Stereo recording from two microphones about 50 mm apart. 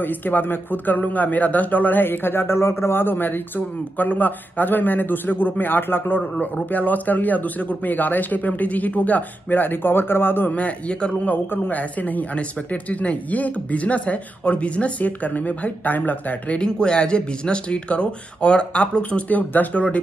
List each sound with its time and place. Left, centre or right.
0.0 s a man's voice: left
10.5 s speech: left
11.2 s a man's voice: left
16.5 s speech: centre; by 19.8 s left